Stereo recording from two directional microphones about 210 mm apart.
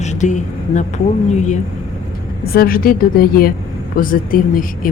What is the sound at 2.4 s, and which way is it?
A woman's voice, 45° left (ahead or behind).